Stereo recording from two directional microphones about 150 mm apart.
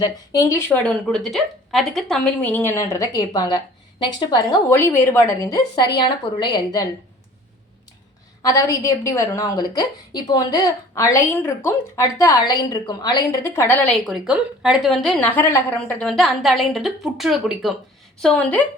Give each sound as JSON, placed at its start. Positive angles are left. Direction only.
{"t": 0.0, "sound": "a woman's voice", "side_deg": 25}
{"t": 0.7, "sound": "a woman's voice", "side_deg": 10}
{"t": 4.7, "sound": "a woman's voice", "side_deg": 10}
{"t": 8.4, "sound": "a woman's voice", "side_deg": 20}
{"t": 14.0, "sound": "a woman's voice", "side_deg": -5}
{"t": 16.0, "sound": "a woman's voice", "side_deg": 5}